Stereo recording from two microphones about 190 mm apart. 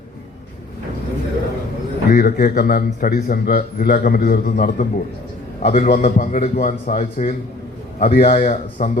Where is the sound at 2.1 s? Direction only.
50° left (ahead or behind).